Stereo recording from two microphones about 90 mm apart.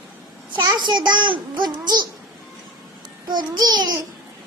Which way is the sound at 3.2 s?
50° right (ahead or behind).